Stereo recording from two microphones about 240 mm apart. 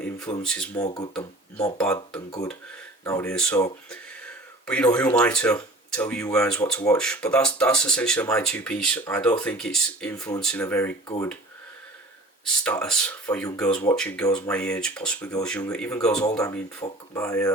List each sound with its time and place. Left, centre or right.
0.0 s a sound: centre
0.4 s speech: centre
0.8 s speech: centre
1.6 s speech: centre
12.5 s speech: centre
16.8 s speech: left
17.2 s speech: centre